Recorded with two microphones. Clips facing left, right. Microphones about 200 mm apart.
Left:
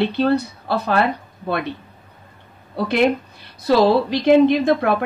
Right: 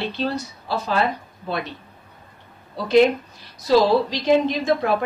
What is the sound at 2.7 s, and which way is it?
Speech, 60° left (ahead or behind).